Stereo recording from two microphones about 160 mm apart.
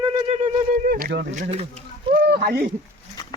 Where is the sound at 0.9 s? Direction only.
70° right (ahead or behind).